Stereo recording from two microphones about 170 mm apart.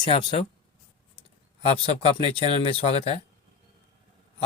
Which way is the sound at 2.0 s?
35° left (ahead or behind).